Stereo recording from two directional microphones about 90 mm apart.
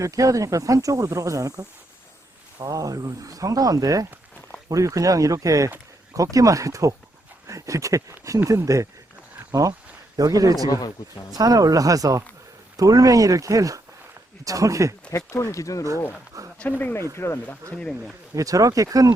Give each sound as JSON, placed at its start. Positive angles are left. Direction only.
{"t": 0.0, "sound": "a man's voice", "side_deg": -40}
{"t": 15.1, "sound": "speech", "side_deg": 35}
{"t": 16.6, "sound": "speech", "side_deg": 20}
{"t": 17.7, "sound": "speech", "side_deg": 10}
{"t": 18.3, "sound": "speech", "side_deg": -40}